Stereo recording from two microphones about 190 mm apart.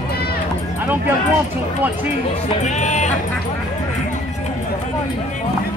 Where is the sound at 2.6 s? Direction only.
40° left (ahead or behind).